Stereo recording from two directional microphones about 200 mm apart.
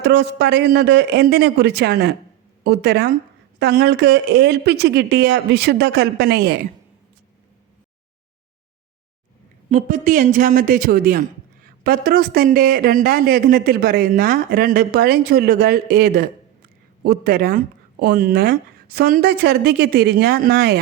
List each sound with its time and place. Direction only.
0.0 s speech: 55° right (ahead or behind)
9.6 s speech: 40° right (ahead or behind)